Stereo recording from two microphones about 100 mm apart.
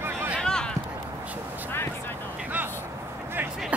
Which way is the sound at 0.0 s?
20° right (ahead or behind).